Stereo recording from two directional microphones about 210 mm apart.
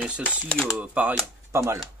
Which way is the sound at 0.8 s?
5° right (ahead or behind).